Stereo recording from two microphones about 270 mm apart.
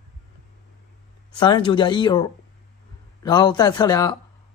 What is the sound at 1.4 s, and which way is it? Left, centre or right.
Speech, centre.